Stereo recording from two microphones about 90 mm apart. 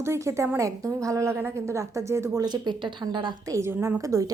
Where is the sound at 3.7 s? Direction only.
25° right (ahead or behind).